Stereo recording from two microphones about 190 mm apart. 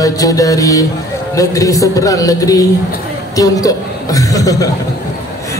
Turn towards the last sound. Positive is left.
turn(degrees=20)  # may be behind; listen again after turning